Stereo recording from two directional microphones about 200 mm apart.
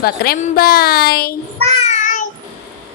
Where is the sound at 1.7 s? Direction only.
35° left (ahead or behind).